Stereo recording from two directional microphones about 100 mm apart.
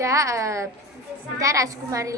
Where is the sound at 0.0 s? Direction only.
30° right (ahead or behind).